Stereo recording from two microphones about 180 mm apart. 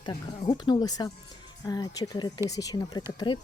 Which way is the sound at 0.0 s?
25° left (ahead or behind).